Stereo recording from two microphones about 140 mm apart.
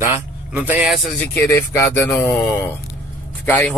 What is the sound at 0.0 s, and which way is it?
Speech, 15° right (ahead or behind).